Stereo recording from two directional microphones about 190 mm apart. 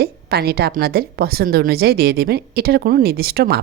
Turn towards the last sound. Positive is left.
turn(degrees=-55)  # may be behind; listen again after turning